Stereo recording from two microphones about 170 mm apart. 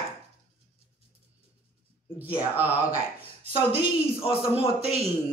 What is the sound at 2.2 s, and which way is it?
Speech, 10° right (ahead or behind).